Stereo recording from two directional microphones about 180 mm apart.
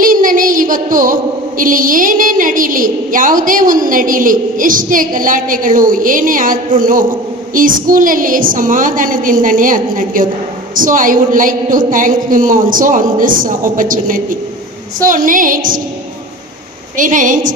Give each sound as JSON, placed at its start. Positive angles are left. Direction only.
{"t": 0.0, "sound": "female singing", "side_deg": -50}
{"t": 17.0, "sound": "female singing", "side_deg": -45}